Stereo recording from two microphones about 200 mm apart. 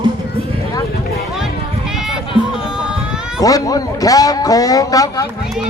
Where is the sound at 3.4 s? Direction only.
15° left (ahead or behind).